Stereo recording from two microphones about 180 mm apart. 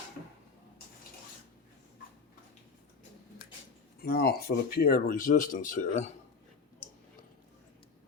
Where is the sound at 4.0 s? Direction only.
55° left (ahead or behind); by 6.1 s 40° left (ahead or behind).